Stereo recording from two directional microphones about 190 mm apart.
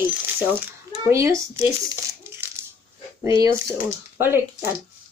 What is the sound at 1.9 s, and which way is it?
Crumpling, 15° right (ahead or behind).